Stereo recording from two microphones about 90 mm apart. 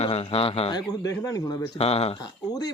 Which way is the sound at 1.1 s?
35° left (ahead or behind).